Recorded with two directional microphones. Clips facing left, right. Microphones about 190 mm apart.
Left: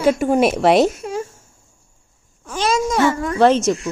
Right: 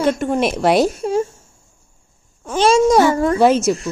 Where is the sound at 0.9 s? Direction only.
30° right (ahead or behind).